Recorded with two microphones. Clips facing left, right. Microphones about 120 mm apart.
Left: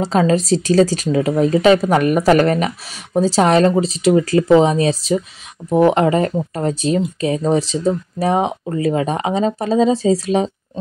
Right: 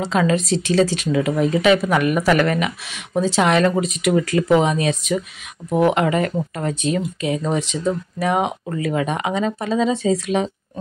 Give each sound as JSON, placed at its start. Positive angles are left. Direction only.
{"t": 0.0, "sound": "speech", "side_deg": 35}